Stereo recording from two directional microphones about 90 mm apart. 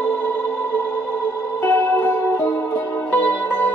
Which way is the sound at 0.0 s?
20° left (ahead or behind).